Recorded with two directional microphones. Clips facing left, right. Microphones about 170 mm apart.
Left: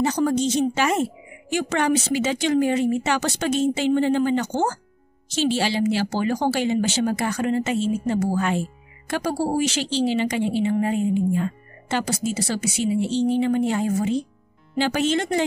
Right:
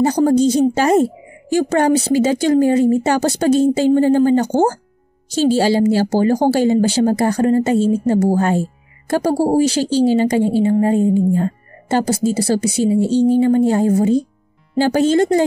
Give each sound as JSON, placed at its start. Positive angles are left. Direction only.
{"t": 0.0, "sound": "speech", "side_deg": -35}